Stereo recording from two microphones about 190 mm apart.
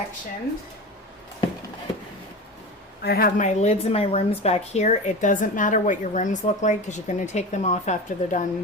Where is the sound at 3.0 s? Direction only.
50° left (ahead or behind).